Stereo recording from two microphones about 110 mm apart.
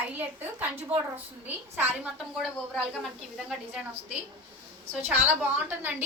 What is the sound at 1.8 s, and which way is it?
Speech, 15° right (ahead or behind).